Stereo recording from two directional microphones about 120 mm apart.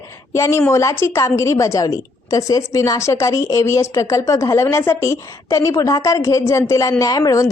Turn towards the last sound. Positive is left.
turn(degrees=30)  # may be behind; listen again after turning